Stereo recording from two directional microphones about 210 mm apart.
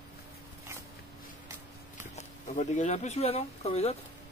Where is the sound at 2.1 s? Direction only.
35° left (ahead or behind).